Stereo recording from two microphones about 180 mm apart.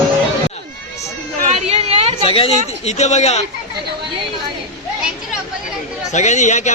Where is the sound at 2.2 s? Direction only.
30° left (ahead or behind).